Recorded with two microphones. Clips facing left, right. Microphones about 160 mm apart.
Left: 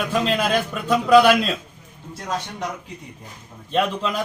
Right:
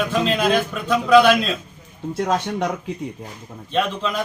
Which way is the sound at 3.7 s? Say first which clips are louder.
Even; 5° left (ahead or behind).